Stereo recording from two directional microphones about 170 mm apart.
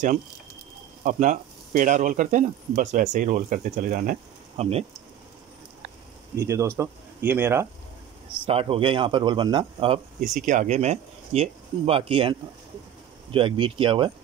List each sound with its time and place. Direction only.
1.0 s speech: 50° right (ahead or behind)
4.6 s speech: 35° right (ahead or behind)
6.3 s speech: 15° right (ahead or behind)
8.5 s speech: 35° right (ahead or behind)
10.4 s speech: 50° right (ahead or behind); by 14.1 s 30° right (ahead or behind)